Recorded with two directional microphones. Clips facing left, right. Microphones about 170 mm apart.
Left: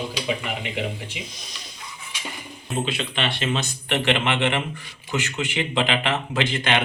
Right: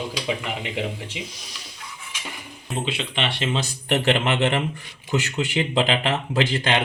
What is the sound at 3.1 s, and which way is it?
Speech, 25° right (ahead or behind).